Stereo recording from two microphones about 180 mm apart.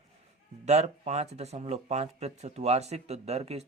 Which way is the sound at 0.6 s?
40° right (ahead or behind).